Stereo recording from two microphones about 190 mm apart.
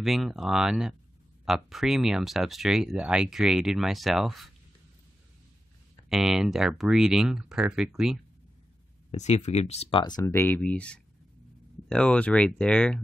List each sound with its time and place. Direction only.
0.0 s speech: centre (ahead or behind)
6.0 s speech: centre (ahead or behind)
9.1 s speech: 40° left (ahead or behind); by 13.0 s 5° left (ahead or behind)